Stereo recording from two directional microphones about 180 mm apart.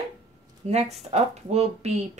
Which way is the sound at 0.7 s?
35° right (ahead or behind).